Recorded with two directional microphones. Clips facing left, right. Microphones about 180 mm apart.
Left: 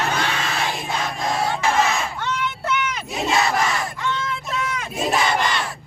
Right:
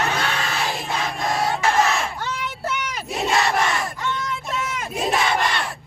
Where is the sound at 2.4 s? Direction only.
35° right (ahead or behind).